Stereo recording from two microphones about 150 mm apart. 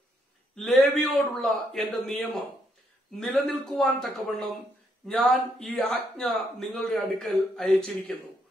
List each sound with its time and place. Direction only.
0.6 s speech: centre (ahead or behind)